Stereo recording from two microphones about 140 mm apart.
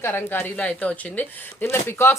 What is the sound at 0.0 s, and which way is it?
Speech, 15° left (ahead or behind).